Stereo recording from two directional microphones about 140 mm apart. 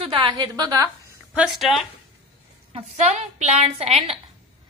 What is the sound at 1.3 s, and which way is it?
Speech, 5° right (ahead or behind).